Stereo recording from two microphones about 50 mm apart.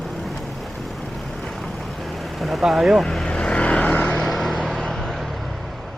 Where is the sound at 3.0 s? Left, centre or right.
Centre.